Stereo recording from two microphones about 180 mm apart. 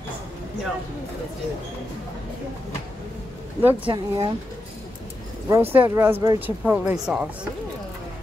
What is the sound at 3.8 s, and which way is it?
Speech, 20° right (ahead or behind).